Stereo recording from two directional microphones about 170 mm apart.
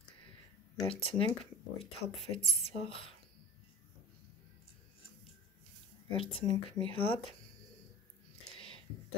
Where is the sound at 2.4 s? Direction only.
35° left (ahead or behind).